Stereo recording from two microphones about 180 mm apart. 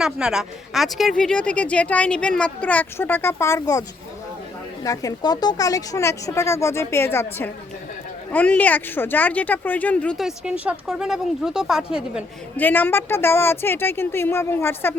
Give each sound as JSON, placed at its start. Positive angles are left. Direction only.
{"t": 0.0, "sound": "speech", "side_deg": -5}
{"t": 12.5, "sound": "speech", "side_deg": 10}